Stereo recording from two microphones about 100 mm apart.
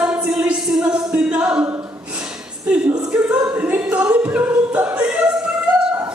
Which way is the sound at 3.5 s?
15° right (ahead or behind).